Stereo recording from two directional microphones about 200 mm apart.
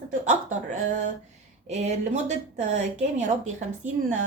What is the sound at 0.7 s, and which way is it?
Speech, 35° right (ahead or behind).